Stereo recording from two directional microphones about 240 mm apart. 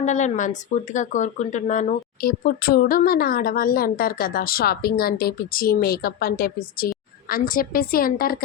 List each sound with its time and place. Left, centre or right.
0.0 s speech: left